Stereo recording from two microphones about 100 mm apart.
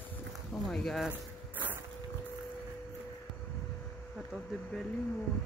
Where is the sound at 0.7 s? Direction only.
5° left (ahead or behind).